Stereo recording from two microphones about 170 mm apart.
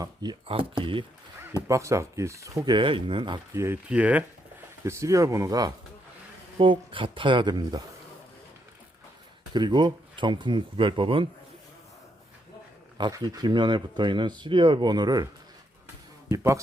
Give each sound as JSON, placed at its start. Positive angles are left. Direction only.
{"t": 0.0, "sound": "speech", "side_deg": -25}
{"t": 1.6, "sound": "speech", "side_deg": -20}
{"t": 3.5, "sound": "speech", "side_deg": -15}
{"t": 9.5, "sound": "speech", "side_deg": -25}
{"t": 13.0, "sound": "speech", "side_deg": -25}
{"t": 16.3, "sound": "speech", "side_deg": -20}